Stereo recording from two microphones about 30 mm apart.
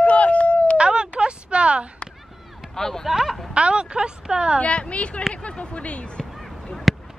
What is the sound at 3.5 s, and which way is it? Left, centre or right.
Speech, right.